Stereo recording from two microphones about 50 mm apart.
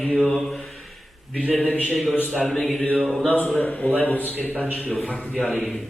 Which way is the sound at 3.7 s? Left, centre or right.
Left.